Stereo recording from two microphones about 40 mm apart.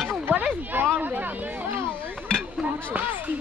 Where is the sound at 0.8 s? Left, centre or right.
Right.